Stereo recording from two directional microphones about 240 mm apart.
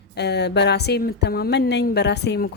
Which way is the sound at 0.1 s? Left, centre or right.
Left.